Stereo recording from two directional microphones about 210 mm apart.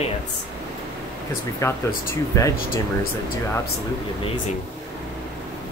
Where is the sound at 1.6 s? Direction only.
15° left (ahead or behind).